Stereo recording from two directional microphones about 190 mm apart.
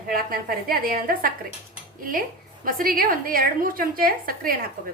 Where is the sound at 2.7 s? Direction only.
50° right (ahead or behind).